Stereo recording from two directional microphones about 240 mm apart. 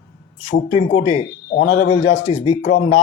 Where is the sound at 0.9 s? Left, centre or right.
Left.